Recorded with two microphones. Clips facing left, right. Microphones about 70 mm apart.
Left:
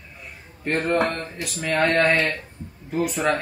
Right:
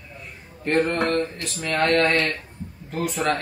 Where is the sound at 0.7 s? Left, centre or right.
Centre.